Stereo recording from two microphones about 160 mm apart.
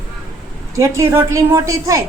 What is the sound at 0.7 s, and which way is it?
A woman's voice, 20° right (ahead or behind).